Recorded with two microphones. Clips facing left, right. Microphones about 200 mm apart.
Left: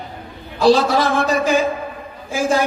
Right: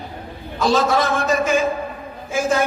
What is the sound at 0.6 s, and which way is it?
A man's voice, 35° left (ahead or behind).